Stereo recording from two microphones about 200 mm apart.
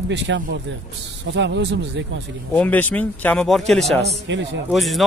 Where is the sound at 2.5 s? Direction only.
10° left (ahead or behind).